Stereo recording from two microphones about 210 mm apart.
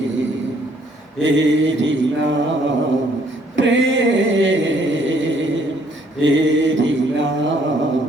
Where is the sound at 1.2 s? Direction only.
60° right (ahead or behind).